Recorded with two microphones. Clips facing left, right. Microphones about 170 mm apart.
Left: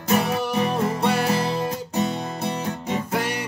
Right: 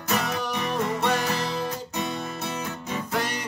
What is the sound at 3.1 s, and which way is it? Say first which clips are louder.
Music: left 1 dB; 10° left (ahead or behind).